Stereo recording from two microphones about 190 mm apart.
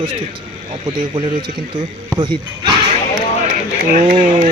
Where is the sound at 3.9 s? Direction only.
45° right (ahead or behind).